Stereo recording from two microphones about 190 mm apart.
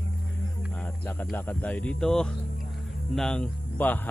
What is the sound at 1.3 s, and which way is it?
Speech, 10° left (ahead or behind).